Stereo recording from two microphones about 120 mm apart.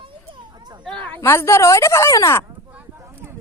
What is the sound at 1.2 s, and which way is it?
Speech, 20° left (ahead or behind).